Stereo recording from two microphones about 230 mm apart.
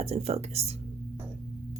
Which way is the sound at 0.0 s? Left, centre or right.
Right.